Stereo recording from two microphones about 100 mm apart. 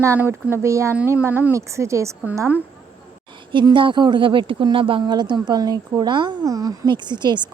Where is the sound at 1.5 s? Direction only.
30° right (ahead or behind).